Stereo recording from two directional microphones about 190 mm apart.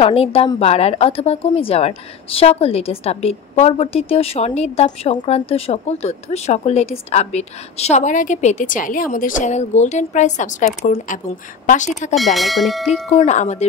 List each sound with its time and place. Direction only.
0.0 s speech: 30° left (ahead or behind)
12.2 s speech: centre (ahead or behind)
13.1 s speech: 35° left (ahead or behind)